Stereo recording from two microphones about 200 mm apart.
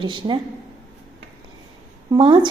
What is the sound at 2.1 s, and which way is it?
Speech, 25° right (ahead or behind).